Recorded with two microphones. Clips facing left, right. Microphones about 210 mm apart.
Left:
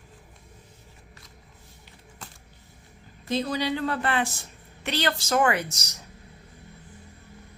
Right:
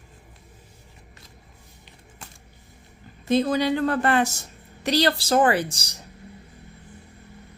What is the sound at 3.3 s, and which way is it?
A woman's voice, 50° right (ahead or behind).